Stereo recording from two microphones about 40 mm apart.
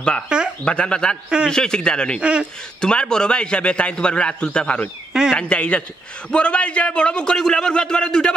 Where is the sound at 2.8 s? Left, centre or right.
Left.